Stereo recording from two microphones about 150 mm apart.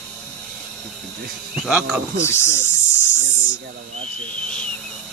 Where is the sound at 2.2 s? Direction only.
20° left (ahead or behind).